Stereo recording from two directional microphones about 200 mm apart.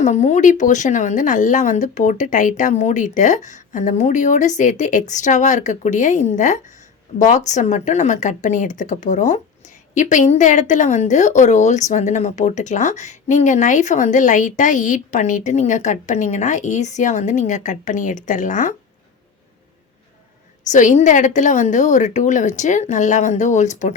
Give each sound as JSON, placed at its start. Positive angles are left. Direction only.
{"t": 0.0, "sound": "speech", "side_deg": 35}
{"t": 20.7, "sound": "speech", "side_deg": 40}